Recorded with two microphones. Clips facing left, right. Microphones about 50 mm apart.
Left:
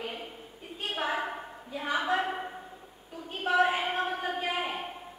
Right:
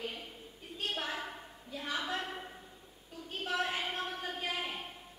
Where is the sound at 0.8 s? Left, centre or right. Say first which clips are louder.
Left 7 dB; centre.